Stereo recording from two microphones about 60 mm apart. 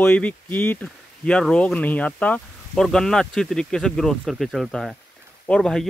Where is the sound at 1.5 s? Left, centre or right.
Centre.